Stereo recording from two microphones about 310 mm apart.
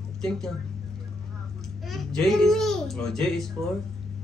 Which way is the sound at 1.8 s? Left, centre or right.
Centre.